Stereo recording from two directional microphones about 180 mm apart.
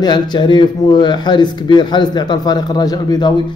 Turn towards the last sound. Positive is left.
turn(degrees=20)  # may be behind; listen again after turning